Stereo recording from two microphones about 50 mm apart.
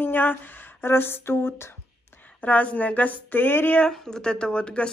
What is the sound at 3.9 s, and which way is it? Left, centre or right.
Speech, centre.